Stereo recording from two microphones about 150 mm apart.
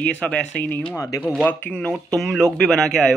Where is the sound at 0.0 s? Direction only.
10° left (ahead or behind).